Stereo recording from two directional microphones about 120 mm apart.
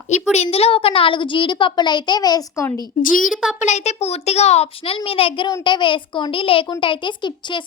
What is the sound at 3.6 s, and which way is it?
A woman's voice, 75° left (ahead or behind).